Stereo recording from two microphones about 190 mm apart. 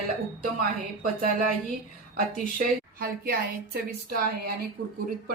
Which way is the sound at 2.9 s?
50° right (ahead or behind).